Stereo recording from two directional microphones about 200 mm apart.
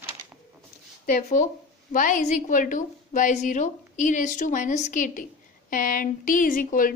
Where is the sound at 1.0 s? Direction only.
45° left (ahead or behind).